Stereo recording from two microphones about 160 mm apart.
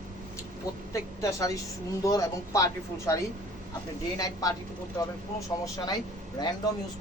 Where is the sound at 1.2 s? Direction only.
20° left (ahead or behind).